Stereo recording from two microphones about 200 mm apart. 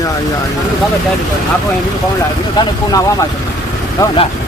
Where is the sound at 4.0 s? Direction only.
15° left (ahead or behind).